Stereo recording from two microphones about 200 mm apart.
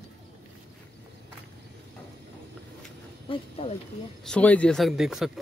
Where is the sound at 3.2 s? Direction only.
30° left (ahead or behind).